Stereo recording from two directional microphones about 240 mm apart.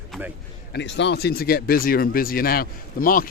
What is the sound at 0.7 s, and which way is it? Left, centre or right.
Speech, left.